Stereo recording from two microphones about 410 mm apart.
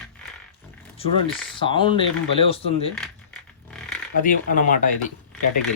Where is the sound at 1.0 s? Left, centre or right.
Centre.